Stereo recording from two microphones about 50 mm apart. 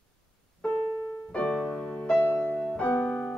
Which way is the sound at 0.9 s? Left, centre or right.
Left.